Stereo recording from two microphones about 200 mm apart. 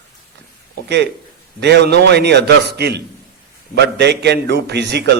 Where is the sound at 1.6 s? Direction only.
55° right (ahead or behind).